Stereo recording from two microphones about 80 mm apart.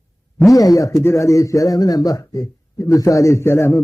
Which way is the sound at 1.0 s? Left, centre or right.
Left.